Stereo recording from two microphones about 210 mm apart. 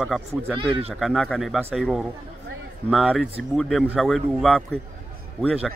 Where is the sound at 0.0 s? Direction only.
5° right (ahead or behind).